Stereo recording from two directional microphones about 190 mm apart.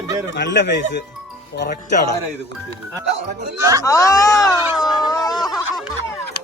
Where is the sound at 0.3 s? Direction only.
70° left (ahead or behind).